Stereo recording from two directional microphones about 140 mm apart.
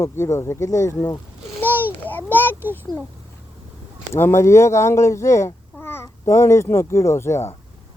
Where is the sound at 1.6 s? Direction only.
15° left (ahead or behind).